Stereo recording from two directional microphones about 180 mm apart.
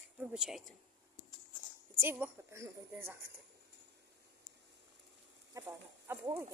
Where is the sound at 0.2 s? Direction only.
5° right (ahead or behind).